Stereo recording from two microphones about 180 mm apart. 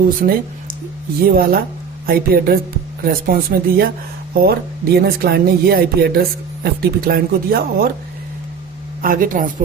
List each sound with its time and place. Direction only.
0.2 s speech: 50° right (ahead or behind)
9.0 s speech: 50° right (ahead or behind)